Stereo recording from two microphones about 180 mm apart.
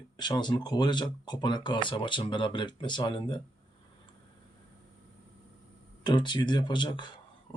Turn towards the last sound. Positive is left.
turn(degrees=25)  # may be behind; listen again after turning